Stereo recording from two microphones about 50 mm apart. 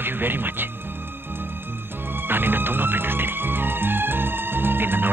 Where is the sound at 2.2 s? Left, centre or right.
Right.